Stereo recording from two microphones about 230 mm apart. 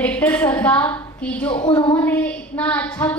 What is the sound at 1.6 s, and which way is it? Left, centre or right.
Speech, left.